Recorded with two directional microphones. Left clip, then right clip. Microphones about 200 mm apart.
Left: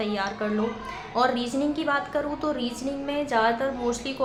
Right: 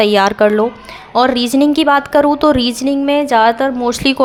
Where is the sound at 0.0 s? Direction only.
60° right (ahead or behind).